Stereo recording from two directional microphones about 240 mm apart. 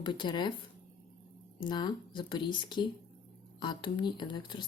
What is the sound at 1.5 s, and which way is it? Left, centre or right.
Speech, centre.